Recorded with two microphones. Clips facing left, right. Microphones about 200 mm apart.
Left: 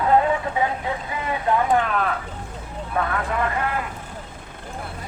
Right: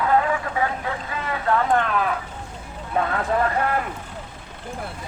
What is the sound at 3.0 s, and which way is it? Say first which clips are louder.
Speech: right 1 dB; 25° right (ahead or behind).